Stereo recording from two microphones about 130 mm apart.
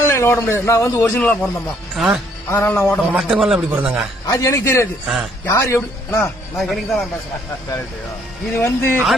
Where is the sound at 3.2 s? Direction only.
5° right (ahead or behind).